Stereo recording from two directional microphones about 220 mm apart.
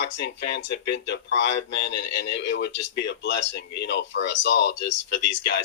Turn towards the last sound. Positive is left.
turn(degrees=50)  # may be behind; listen again after turning